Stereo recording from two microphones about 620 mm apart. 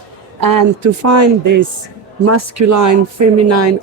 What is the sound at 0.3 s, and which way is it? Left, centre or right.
A woman's voice, right.